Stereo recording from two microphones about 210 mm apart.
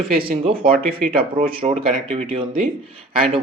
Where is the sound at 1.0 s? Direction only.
35° right (ahead or behind).